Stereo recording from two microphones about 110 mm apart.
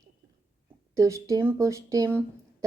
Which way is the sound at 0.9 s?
30° right (ahead or behind).